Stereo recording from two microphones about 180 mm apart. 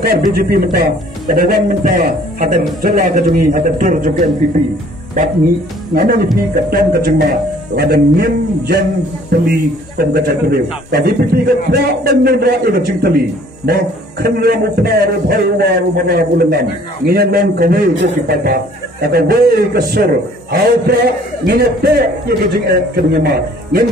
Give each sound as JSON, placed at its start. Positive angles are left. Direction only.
{"t": 0.3, "sound": "a man's voice", "side_deg": -55}
{"t": 5.9, "sound": "a man's voice", "side_deg": -50}